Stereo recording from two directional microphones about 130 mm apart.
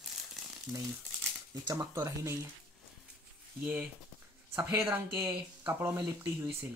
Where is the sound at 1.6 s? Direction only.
25° right (ahead or behind).